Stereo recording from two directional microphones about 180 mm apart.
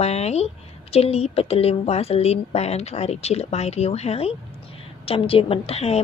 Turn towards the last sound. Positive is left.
turn(degrees=35)  # may be behind; listen again after turning